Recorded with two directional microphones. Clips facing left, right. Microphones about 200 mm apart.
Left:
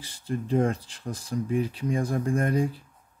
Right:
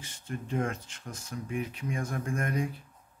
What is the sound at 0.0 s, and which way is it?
Speech, 35° left (ahead or behind).